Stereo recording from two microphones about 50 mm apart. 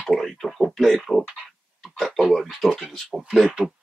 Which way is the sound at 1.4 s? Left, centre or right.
Centre.